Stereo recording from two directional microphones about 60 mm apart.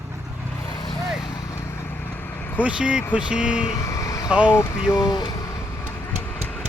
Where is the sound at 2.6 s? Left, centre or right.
Centre.